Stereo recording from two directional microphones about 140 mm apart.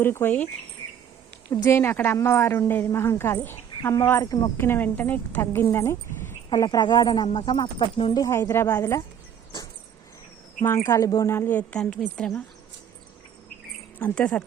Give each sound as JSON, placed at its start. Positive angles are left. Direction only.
{"t": 0.0, "sound": "a woman's voice", "side_deg": 15}
{"t": 1.5, "sound": "a woman's voice", "side_deg": 15}
{"t": 8.2, "sound": "a woman's voice", "side_deg": 20}
{"t": 10.8, "sound": "a woman's voice", "side_deg": 20}
{"t": 14.0, "sound": "a woman's voice", "side_deg": 10}